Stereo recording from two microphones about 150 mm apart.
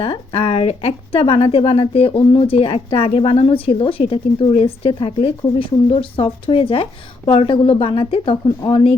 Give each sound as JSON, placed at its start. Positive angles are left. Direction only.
{"t": 0.0, "sound": "speech", "side_deg": 35}